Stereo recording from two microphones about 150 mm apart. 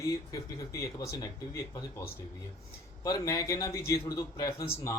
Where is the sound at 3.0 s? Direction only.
25° left (ahead or behind).